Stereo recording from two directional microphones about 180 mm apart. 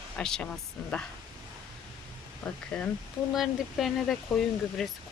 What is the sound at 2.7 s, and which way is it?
Speech, 5° left (ahead or behind).